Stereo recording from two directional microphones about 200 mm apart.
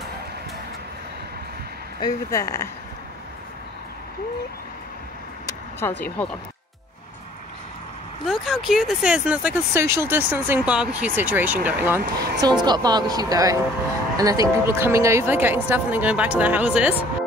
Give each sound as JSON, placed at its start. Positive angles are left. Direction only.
{"t": 2.0, "sound": "speech", "side_deg": 20}
{"t": 5.8, "sound": "speech", "side_deg": 10}
{"t": 8.3, "sound": "speech", "side_deg": 0}
{"t": 12.4, "sound": "a woman's voice", "side_deg": -20}